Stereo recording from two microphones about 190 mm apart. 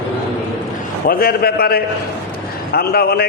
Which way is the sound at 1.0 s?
55° left (ahead or behind).